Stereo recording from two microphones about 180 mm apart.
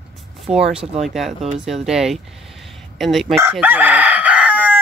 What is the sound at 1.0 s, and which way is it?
A woman's voice, centre (ahead or behind).